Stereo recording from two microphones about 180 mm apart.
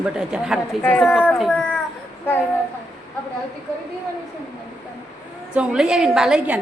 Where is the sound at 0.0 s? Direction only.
5° right (ahead or behind).